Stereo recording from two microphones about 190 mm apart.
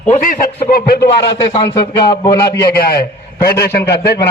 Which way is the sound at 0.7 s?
55° left (ahead or behind).